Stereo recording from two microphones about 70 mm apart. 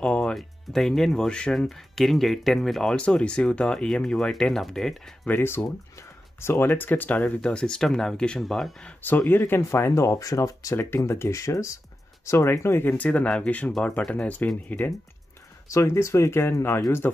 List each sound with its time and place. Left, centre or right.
0.0 s music: centre
0.4 s speech: centre
5.2 s speech: left; by 8.8 s centre
9.3 s speech: left
12.9 s speech: centre
15.7 s speech: left